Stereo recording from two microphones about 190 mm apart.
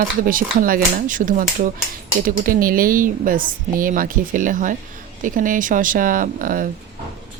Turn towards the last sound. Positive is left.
turn(degrees=-45)  # may be behind; listen again after turning